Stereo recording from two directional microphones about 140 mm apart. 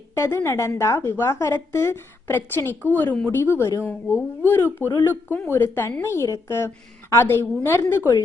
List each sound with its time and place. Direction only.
0.1 s a woman's voice: 20° left (ahead or behind)